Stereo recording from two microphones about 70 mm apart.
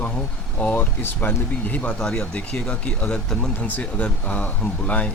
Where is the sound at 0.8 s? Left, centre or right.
Left.